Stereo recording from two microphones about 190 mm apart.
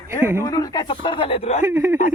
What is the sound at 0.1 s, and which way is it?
Speech, 15° right (ahead or behind).